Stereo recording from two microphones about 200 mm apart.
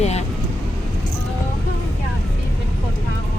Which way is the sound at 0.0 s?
35° left (ahead or behind).